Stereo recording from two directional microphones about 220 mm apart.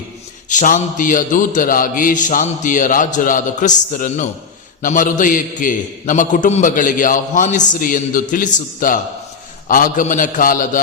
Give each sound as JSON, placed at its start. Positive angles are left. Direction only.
{"t": 0.5, "sound": "a man's voice", "side_deg": 35}